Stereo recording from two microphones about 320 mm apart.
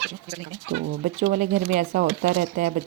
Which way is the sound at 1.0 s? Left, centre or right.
Right.